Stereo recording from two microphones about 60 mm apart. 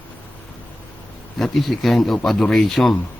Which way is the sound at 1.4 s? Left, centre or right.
Centre.